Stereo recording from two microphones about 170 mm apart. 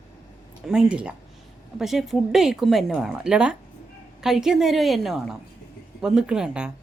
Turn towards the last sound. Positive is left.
turn(degrees=-5)  # may be behind; listen again after turning